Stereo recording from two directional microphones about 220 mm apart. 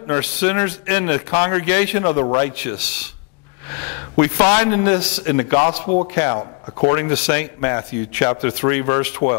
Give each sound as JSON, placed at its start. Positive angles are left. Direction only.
{"t": 0.1, "sound": "a man's voice", "side_deg": 15}